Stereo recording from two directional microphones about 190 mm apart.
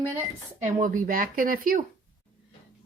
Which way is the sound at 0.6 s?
40° right (ahead or behind).